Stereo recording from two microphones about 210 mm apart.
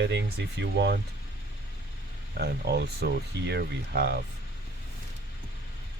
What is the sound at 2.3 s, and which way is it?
Speech, 50° right (ahead or behind).